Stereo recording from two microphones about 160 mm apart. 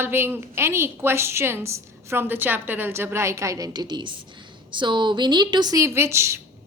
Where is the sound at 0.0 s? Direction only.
15° right (ahead or behind).